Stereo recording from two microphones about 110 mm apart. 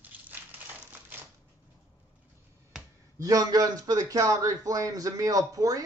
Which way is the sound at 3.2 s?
35° right (ahead or behind).